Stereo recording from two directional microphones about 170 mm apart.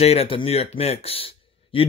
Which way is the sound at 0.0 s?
35° left (ahead or behind).